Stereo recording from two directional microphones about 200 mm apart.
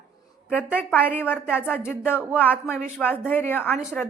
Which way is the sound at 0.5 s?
5° right (ahead or behind).